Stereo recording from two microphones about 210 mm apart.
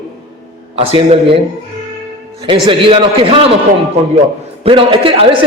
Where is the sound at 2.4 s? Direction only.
25° right (ahead or behind).